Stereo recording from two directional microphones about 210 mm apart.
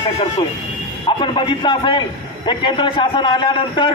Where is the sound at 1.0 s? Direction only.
25° left (ahead or behind).